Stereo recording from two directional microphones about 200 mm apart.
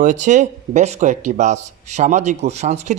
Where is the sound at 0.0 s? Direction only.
40° right (ahead or behind).